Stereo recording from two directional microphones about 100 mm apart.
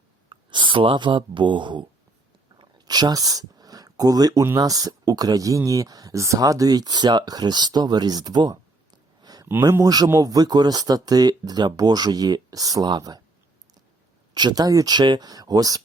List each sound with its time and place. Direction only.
0.3 s speech: 50° right (ahead or behind)
2.6 s a sound: 45° right (ahead or behind)
4.5 s speech: 35° right (ahead or behind)
14.3 s speech: 45° right (ahead or behind)